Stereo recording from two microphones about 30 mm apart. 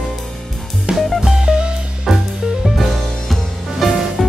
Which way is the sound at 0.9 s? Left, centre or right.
Right.